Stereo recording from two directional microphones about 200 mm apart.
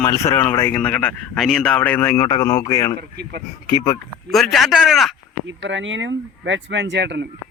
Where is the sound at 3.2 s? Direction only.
55° right (ahead or behind).